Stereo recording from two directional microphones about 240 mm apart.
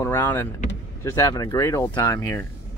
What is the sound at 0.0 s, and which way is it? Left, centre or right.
Vehicle, centre.